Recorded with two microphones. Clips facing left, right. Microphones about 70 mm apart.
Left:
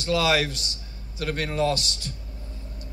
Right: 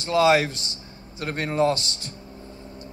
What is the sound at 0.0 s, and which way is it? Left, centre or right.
A man's voice, right.